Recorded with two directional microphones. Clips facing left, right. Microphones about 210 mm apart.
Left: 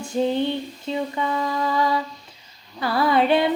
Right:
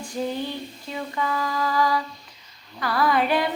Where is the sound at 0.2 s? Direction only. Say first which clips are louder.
Left 6 dB; 25° left (ahead or behind).